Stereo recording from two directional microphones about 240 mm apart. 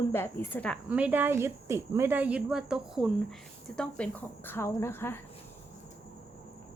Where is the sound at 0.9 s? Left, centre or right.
Centre.